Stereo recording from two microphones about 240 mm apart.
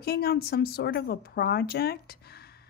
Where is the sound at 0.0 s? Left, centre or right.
Left.